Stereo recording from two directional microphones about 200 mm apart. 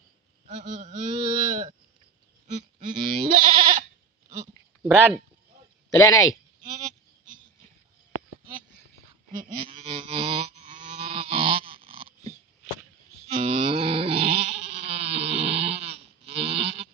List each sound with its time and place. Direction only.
0.4 s speech: 35° right (ahead or behind)
2.5 s goat: 35° right (ahead or behind)
5.9 s speech: 15° left (ahead or behind)
9.5 s a sound: 25° right (ahead or behind)